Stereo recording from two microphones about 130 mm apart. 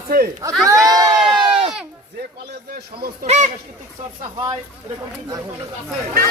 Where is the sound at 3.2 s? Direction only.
60° right (ahead or behind).